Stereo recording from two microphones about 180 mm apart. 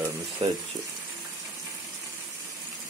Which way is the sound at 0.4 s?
35° right (ahead or behind).